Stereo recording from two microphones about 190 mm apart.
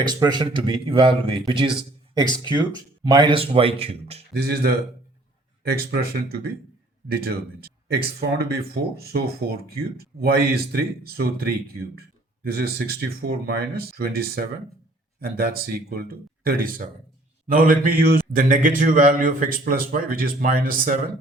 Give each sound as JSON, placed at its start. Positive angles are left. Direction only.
{"t": 0.0, "sound": "speech", "side_deg": -20}
{"t": 4.4, "sound": "a man's voice", "side_deg": -55}
{"t": 10.2, "sound": "a man's voice", "side_deg": -50}